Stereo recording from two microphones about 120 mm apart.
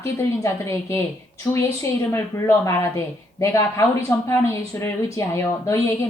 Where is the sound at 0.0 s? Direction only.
20° left (ahead or behind).